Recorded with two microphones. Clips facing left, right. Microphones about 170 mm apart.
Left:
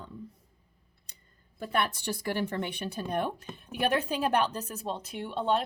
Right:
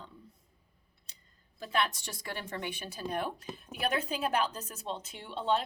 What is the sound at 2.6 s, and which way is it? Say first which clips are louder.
Speech: left 5 dB; 55° left (ahead or behind).